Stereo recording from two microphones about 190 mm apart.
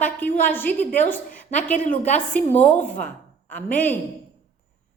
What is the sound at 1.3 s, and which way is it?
A woman's voice, 40° left (ahead or behind).